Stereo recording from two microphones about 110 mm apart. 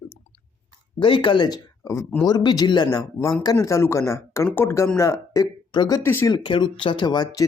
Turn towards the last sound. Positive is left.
turn(degrees=40)  # may be behind; listen again after turning